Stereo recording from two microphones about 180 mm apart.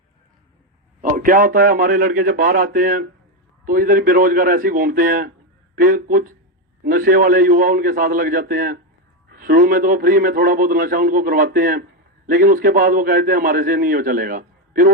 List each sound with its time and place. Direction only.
1.0 s a man's voice: 50° right (ahead or behind)